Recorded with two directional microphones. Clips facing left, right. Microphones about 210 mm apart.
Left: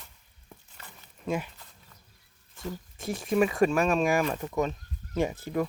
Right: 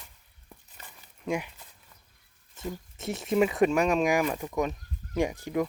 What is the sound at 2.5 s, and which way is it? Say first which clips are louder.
Speech: right 1 dB; 20° right (ahead or behind).